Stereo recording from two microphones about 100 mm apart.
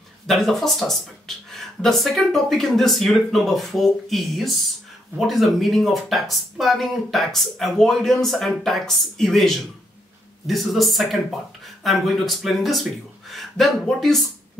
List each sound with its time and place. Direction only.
0.3 s speech: centre (ahead or behind)